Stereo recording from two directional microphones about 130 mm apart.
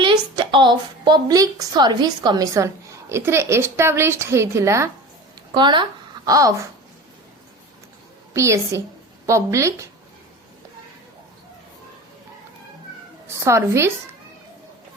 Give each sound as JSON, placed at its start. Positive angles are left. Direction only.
{"t": 0.0, "sound": "a woman's voice", "side_deg": -35}
{"t": 5.5, "sound": "speech", "side_deg": -35}
{"t": 8.3, "sound": "a woman's voice", "side_deg": -20}
{"t": 13.2, "sound": "a woman's voice", "side_deg": -20}